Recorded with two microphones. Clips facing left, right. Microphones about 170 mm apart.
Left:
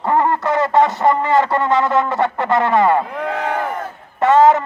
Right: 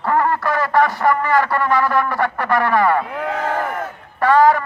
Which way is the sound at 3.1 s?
Centre (ahead or behind).